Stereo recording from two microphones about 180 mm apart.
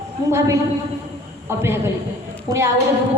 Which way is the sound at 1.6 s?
15° right (ahead or behind).